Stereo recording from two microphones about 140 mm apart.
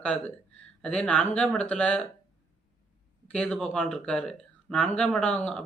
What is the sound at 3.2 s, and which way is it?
Speech, 5° left (ahead or behind).